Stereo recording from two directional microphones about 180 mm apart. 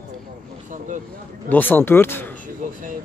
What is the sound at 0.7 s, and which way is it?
Speech, 45° right (ahead or behind).